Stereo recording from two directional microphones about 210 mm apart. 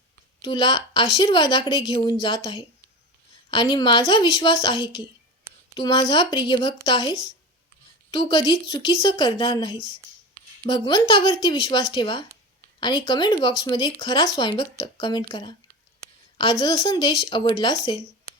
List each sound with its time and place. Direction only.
0.4 s speech: 20° left (ahead or behind)